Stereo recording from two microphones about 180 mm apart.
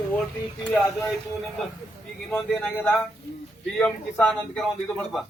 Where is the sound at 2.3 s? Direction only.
5° left (ahead or behind).